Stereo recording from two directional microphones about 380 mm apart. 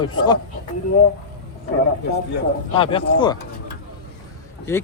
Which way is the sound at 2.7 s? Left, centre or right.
Centre.